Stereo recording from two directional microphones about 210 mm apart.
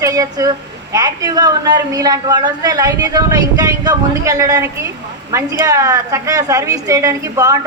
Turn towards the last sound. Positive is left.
turn(degrees=-15)  # may be behind; listen again after turning